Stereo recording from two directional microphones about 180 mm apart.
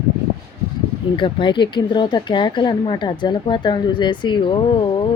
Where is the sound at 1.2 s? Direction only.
25° left (ahead or behind).